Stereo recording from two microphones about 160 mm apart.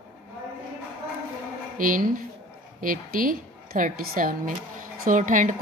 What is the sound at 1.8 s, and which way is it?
Speech, 60° right (ahead or behind).